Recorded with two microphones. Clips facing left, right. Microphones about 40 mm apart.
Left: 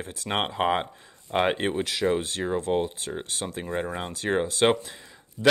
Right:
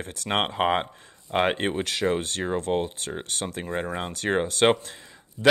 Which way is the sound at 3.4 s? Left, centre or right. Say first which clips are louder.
Right 1 dB; centre.